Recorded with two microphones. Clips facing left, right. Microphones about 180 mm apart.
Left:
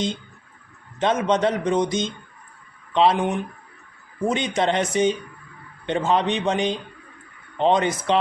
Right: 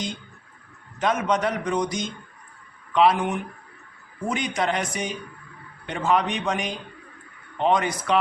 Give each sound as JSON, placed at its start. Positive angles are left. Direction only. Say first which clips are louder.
{"t": 0.9, "sound": "speech", "louder": "left 3 dB", "side_deg": 25}